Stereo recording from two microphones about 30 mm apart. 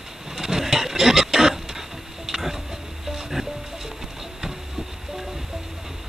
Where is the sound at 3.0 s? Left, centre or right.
Centre.